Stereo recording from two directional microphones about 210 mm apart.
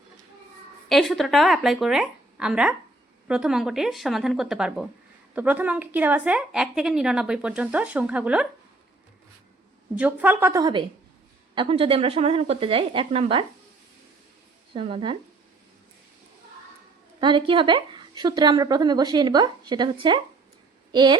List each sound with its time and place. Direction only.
0.9 s a woman's voice: centre (ahead or behind)
9.9 s a woman's voice: 5° right (ahead or behind); by 13.4 s 25° right (ahead or behind)
14.7 s a woman's voice: 25° right (ahead or behind)
17.2 s a woman's voice: 20° right (ahead or behind)